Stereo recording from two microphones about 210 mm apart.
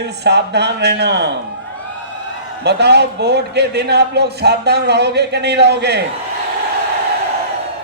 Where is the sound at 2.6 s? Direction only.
55° right (ahead or behind).